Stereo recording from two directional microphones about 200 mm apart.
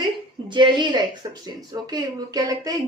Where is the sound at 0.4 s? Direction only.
25° right (ahead or behind).